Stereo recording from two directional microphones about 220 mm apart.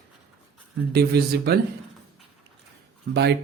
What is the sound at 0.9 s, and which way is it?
Speech, 45° right (ahead or behind).